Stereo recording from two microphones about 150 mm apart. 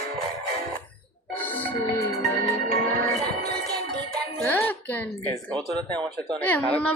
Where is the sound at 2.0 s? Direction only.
20° left (ahead or behind).